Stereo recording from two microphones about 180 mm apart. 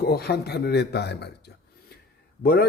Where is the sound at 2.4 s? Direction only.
60° left (ahead or behind).